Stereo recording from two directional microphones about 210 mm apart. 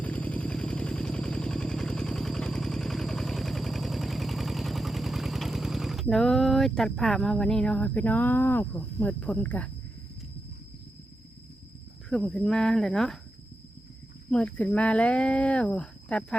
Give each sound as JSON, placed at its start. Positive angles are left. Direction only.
{"t": 0.0, "sound": "a sound", "side_deg": 5}
{"t": 12.0, "sound": "speech", "side_deg": 5}
{"t": 14.3, "sound": "speech", "side_deg": 5}